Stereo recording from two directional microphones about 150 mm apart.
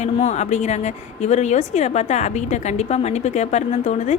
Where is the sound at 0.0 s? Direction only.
50° left (ahead or behind).